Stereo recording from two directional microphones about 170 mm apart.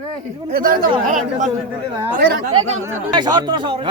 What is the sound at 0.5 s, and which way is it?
Speech, 55° right (ahead or behind).